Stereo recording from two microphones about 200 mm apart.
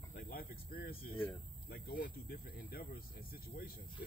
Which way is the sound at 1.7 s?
50° left (ahead or behind).